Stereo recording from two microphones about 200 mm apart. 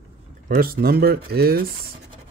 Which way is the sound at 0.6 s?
50° right (ahead or behind).